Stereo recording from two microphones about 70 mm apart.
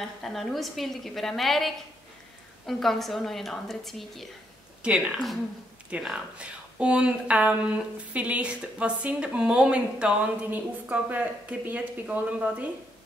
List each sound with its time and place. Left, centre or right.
0.0 s a woman's voice: centre
4.8 s speech: centre